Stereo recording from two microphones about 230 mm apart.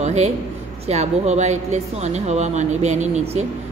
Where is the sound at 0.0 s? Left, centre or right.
Right.